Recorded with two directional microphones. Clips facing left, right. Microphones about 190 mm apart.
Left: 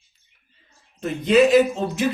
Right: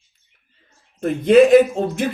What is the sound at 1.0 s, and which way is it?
Speech, 55° right (ahead or behind).